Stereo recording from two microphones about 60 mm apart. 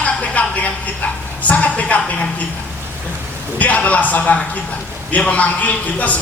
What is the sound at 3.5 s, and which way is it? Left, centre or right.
A man's voice, left.